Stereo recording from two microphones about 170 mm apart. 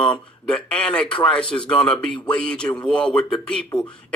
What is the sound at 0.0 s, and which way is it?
Speech, 5° left (ahead or behind).